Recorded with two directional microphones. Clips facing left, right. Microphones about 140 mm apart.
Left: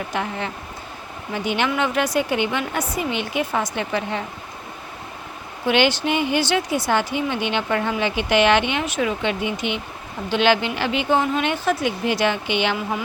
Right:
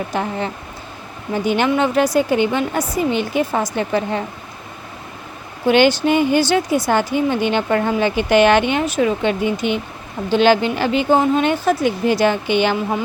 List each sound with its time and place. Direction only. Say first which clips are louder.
0.1 s a woman's voice: right 4 dB; 35° right (ahead or behind)
5.6 s a woman's voice: right 6 dB; 40° right (ahead or behind)